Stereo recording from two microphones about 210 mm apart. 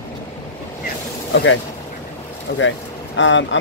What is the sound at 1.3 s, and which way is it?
Speech, 60° left (ahead or behind).